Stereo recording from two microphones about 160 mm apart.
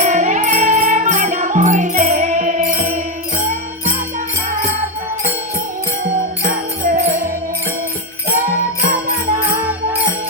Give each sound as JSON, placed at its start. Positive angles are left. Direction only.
{"t": 0.0, "sound": "music", "side_deg": -50}
{"t": 6.8, "sound": "music", "side_deg": -45}